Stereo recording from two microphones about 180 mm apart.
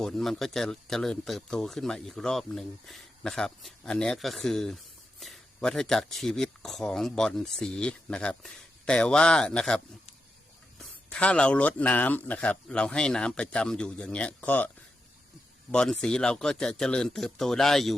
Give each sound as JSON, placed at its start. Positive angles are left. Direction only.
{"t": 0.0, "sound": "speech", "side_deg": 0}
{"t": 15.7, "sound": "speech", "side_deg": 5}